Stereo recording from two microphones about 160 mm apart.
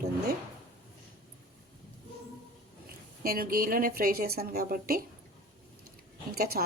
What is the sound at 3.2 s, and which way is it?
Speech, 65° right (ahead or behind).